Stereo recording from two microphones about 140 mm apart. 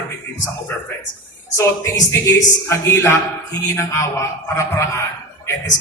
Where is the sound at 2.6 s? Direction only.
20° left (ahead or behind).